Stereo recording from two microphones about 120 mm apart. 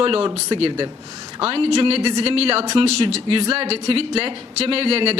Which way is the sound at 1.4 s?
50° right (ahead or behind).